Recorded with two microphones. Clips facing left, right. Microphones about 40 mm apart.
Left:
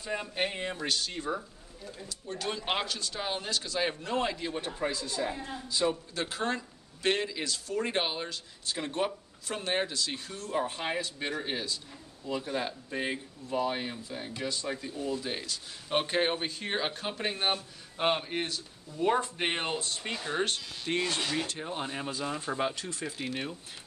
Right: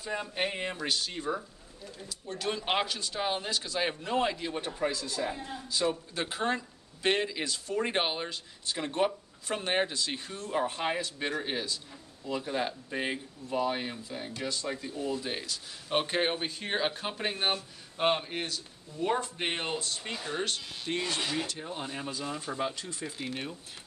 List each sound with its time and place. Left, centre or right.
0.0 s a man's voice: centre
2.3 s a man's voice: centre
6.1 s a man's voice: centre
9.5 s speech: centre
10.6 s speech: centre
21.5 s speech: centre